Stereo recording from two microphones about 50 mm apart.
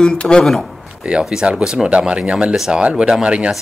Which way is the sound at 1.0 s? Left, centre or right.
Right.